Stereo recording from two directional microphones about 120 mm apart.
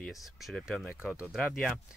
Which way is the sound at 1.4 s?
Centre (ahead or behind).